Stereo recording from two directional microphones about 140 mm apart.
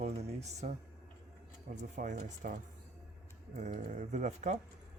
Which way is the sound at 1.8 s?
60° right (ahead or behind).